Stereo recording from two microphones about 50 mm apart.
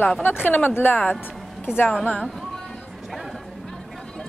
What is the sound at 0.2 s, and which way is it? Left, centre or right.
Speech, left.